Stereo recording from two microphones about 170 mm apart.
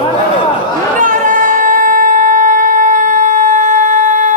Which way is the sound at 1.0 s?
50° right (ahead or behind).